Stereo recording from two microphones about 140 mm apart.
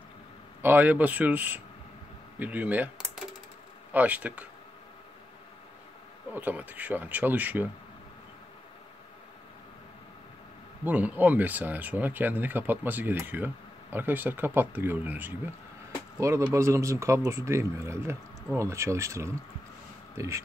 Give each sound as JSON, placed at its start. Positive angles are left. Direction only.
{"t": 0.6, "sound": "speech", "side_deg": -15}
{"t": 3.9, "sound": "speech", "side_deg": -10}
{"t": 6.3, "sound": "speech", "side_deg": -10}
{"t": 10.8, "sound": "speech", "side_deg": -10}